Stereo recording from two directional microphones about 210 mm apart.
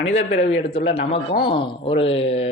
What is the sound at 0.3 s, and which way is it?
Speech, 60° left (ahead or behind).